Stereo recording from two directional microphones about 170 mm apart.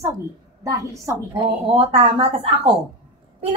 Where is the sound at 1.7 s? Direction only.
35° right (ahead or behind).